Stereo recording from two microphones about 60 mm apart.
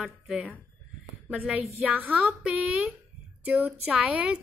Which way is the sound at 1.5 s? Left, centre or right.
Right.